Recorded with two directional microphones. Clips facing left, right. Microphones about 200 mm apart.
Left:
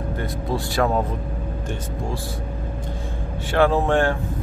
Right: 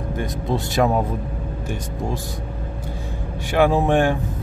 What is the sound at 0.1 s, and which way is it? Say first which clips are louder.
Speech: right 3 dB; 20° right (ahead or behind).